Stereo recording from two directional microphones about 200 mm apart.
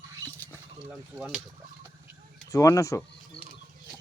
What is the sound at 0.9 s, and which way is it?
Speech, 5° right (ahead or behind).